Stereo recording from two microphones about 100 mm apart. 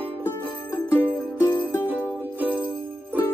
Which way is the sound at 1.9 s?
20° right (ahead or behind).